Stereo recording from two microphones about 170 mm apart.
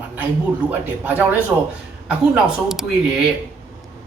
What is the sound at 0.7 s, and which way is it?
Speech, 10° right (ahead or behind).